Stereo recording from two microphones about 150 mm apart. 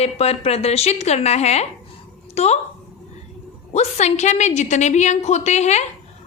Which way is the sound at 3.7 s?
45° left (ahead or behind).